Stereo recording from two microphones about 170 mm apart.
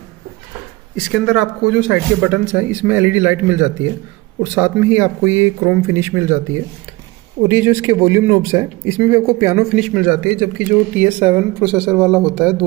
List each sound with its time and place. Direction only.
1.1 s a man's voice: 5° right (ahead or behind)
9.8 s speech: 5° right (ahead or behind)